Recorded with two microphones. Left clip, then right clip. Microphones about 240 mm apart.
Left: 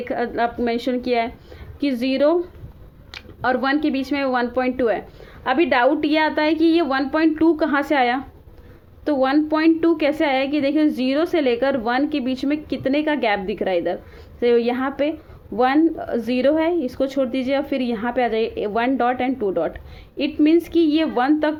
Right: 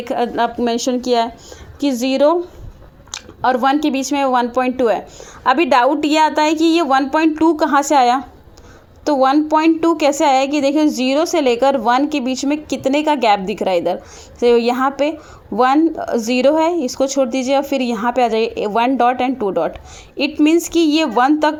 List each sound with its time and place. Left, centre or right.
0.0 s speech: right